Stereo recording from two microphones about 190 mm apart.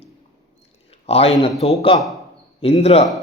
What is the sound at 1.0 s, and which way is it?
Speech, 30° left (ahead or behind).